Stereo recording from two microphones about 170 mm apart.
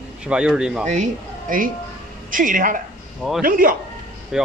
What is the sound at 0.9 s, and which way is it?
A man's voice, 45° right (ahead or behind).